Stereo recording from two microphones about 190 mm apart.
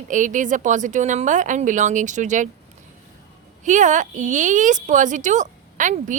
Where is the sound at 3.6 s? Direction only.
40° right (ahead or behind).